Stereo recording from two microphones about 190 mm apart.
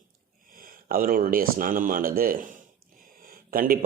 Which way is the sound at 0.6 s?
50° right (ahead or behind).